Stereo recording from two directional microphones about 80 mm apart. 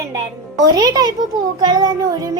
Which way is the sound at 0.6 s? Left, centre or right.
Right.